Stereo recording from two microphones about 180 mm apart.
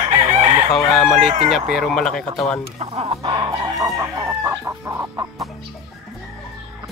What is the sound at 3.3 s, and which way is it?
Chicken, 20° right (ahead or behind).